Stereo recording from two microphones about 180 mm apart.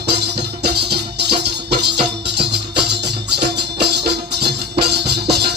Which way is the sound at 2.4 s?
70° right (ahead or behind).